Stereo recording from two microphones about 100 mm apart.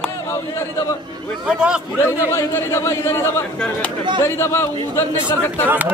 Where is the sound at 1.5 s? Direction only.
10° right (ahead or behind).